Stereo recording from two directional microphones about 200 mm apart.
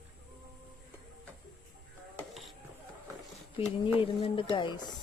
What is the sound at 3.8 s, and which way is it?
Speech, 25° left (ahead or behind).